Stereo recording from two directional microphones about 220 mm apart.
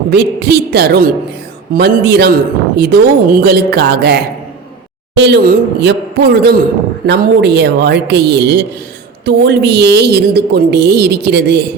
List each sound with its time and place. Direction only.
0.1 s a woman's voice: 50° right (ahead or behind)